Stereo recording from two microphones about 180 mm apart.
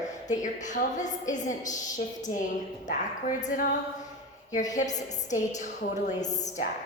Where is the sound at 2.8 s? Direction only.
45° left (ahead or behind).